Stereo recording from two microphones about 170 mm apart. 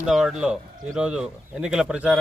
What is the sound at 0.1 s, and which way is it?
Speech, 5° right (ahead or behind).